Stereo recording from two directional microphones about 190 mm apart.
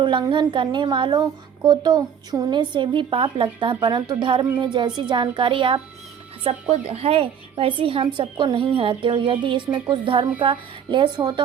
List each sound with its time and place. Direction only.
0.0 s a woman's voice: 25° right (ahead or behind)